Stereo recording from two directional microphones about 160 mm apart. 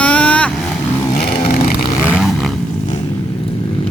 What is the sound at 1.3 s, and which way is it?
Vehicle, 40° left (ahead or behind).